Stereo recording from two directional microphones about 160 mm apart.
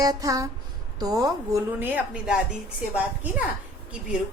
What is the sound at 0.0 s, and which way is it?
A woman's voice, 20° right (ahead or behind).